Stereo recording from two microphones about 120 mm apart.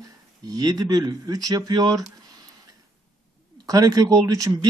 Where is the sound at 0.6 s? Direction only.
35° right (ahead or behind).